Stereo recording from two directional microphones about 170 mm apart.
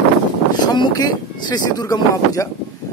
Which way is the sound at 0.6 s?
25° left (ahead or behind).